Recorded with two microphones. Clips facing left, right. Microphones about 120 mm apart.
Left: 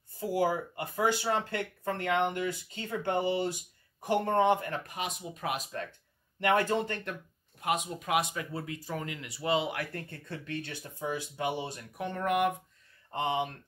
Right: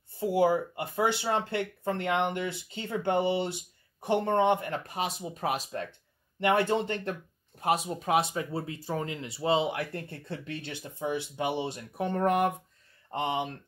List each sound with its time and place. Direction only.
0.2 s speech: 25° right (ahead or behind)